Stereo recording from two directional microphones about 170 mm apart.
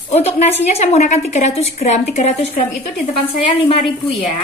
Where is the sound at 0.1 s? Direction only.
40° left (ahead or behind).